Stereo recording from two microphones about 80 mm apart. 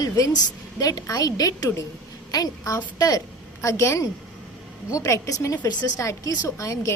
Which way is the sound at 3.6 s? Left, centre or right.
Left.